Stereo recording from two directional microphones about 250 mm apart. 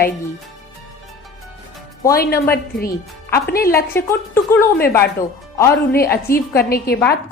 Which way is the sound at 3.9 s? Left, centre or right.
Centre.